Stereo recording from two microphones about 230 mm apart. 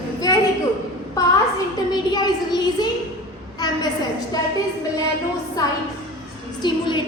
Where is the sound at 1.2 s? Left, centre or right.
Centre.